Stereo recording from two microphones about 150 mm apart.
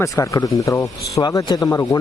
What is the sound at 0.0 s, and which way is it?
Speech, 20° left (ahead or behind).